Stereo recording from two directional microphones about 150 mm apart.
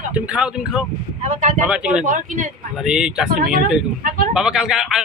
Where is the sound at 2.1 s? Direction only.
60° right (ahead or behind).